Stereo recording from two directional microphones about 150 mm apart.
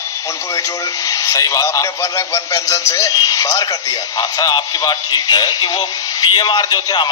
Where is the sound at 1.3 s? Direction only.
25° left (ahead or behind).